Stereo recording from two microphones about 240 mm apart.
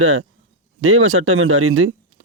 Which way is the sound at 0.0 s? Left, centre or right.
Right.